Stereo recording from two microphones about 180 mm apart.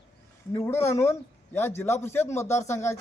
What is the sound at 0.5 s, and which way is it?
A man's voice, 15° left (ahead or behind).